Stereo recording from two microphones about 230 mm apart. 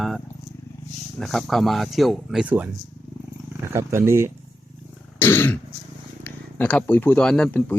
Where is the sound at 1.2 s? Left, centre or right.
Centre.